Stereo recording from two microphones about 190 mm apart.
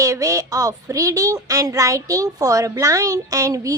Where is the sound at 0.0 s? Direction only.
15° right (ahead or behind).